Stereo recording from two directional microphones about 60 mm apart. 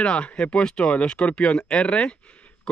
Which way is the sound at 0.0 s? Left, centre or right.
Centre.